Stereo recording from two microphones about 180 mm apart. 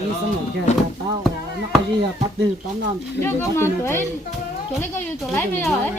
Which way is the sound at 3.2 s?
10° left (ahead or behind).